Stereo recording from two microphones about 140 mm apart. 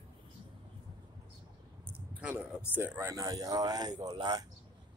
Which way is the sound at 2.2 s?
10° right (ahead or behind).